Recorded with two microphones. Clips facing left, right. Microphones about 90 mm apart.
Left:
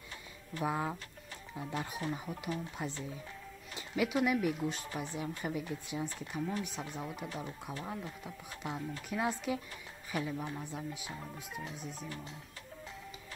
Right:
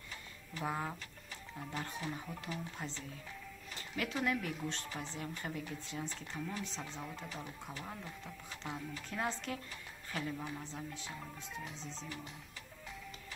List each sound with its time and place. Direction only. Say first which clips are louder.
0.7 s speech: left 4 dB; 20° left (ahead or behind)
9.1 s speech: left 5 dB; 15° left (ahead or behind)